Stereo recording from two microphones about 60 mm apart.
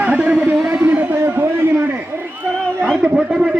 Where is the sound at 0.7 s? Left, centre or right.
Right.